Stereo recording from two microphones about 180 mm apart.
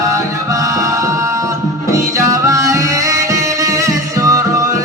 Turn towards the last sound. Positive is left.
turn(degrees=-20)  # may be behind; listen again after turning